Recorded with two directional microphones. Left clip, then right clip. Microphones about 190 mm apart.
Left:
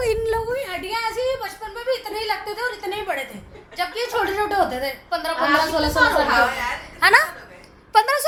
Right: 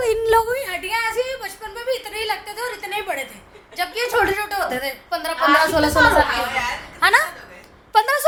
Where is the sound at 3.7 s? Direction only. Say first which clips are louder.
Right 3 dB; 5° right (ahead or behind).